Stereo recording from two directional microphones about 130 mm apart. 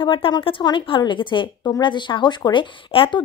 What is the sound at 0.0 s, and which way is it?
A woman's voice, 40° left (ahead or behind).